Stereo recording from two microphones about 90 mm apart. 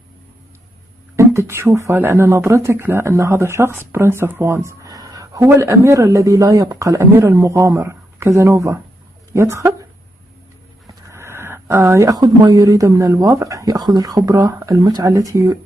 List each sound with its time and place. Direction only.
1.1 s speech: 30° right (ahead or behind)
11.1 s a sound: 25° right (ahead or behind)
12.2 s speech: 45° right (ahead or behind)
14.8 s speech: 50° right (ahead or behind)
15.0 s speech: 40° right (ahead or behind)